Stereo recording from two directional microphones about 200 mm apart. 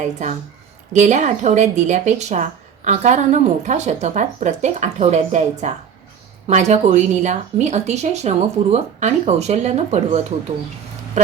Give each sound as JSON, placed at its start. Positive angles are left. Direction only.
{"t": 0.9, "sound": "speech", "side_deg": -35}